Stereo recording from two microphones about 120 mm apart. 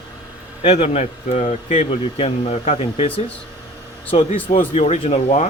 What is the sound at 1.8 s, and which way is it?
Speech, 60° left (ahead or behind).